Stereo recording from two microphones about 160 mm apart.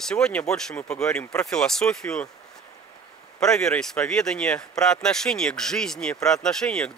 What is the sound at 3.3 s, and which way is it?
Speech, 5° left (ahead or behind).